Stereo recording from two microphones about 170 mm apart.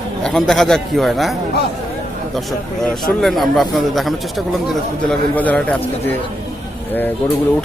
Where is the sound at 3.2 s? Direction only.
Centre (ahead or behind).